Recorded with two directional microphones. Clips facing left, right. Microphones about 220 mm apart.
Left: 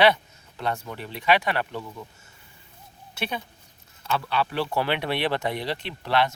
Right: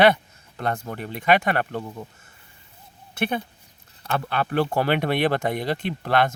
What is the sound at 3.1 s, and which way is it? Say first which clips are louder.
Speech: right 6 dB; 55° right (ahead or behind).